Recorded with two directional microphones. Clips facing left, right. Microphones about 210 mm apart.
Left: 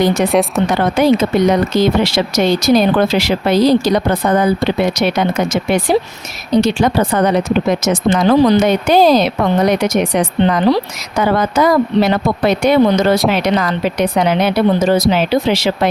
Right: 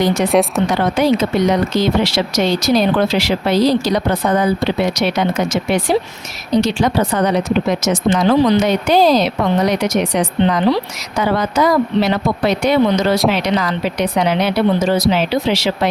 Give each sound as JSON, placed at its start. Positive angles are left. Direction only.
{"t": 0.0, "sound": "speech", "side_deg": 55}
{"t": 0.3, "sound": "a woman's voice", "side_deg": 0}
{"t": 0.7, "sound": "speech", "side_deg": 50}
{"t": 6.6, "sound": "speech", "side_deg": 55}